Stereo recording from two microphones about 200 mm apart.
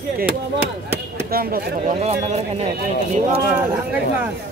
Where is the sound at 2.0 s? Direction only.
35° right (ahead or behind).